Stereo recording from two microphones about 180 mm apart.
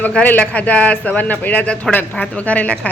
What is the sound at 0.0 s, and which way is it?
Speech, 10° left (ahead or behind).